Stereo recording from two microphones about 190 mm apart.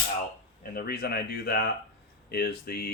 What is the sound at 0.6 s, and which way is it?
Speech, 50° left (ahead or behind).